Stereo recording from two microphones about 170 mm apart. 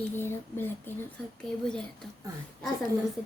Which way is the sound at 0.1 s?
15° left (ahead or behind).